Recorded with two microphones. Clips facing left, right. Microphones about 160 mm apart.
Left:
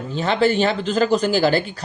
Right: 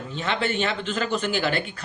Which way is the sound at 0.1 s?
35° left (ahead or behind).